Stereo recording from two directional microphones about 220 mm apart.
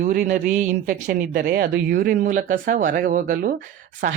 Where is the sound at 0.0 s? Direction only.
35° right (ahead or behind).